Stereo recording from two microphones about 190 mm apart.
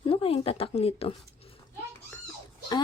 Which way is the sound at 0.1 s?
30° left (ahead or behind).